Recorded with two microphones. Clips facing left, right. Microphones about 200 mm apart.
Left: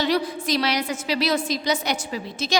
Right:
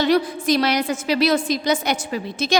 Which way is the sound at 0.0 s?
50° right (ahead or behind).